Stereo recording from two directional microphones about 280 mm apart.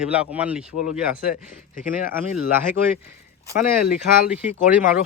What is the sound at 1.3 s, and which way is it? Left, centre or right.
Speech, left.